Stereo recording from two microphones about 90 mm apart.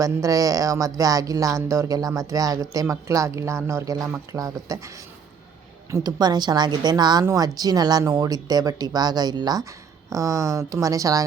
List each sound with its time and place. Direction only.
0.0 s a woman's voice: 40° right (ahead or behind)
5.9 s speech: 50° right (ahead or behind)